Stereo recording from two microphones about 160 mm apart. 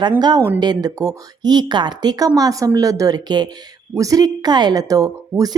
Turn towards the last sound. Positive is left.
turn(degrees=-20)  # may be behind; listen again after turning